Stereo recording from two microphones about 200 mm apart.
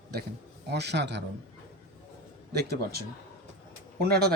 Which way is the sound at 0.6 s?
55° right (ahead or behind).